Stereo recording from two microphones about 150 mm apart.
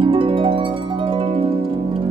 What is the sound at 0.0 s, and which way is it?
Harp, 35° right (ahead or behind).